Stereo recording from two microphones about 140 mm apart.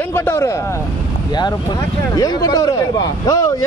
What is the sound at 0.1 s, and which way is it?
Speech, 20° left (ahead or behind).